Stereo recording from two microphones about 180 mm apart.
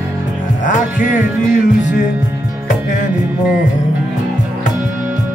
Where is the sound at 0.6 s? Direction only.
45° left (ahead or behind).